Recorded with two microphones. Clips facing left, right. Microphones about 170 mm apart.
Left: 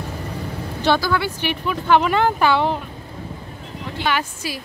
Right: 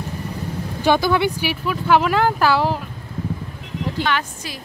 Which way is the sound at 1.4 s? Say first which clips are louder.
Right 1 dB; 5° right (ahead or behind).